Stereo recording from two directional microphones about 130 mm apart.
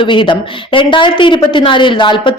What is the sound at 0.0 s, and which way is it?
A woman's voice, 40° left (ahead or behind).